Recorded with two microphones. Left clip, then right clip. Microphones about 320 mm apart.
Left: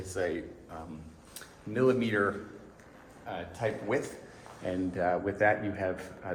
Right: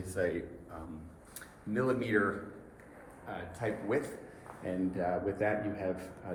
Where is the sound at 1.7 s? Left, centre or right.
Left.